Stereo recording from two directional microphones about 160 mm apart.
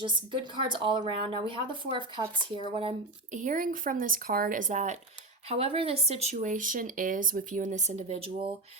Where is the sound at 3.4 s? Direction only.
55° right (ahead or behind).